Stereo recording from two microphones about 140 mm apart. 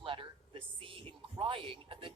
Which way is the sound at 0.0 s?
40° right (ahead or behind).